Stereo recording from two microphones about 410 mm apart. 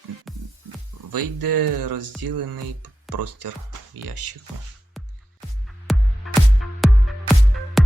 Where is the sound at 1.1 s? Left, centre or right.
Right.